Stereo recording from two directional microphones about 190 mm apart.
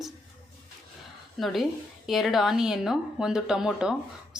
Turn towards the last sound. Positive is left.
turn(degrees=-5)  # may be behind; listen again after turning